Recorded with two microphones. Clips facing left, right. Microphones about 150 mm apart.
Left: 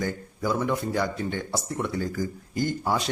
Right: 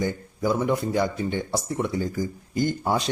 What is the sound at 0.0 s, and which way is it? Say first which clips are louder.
Speech: right 3 dB; 15° right (ahead or behind).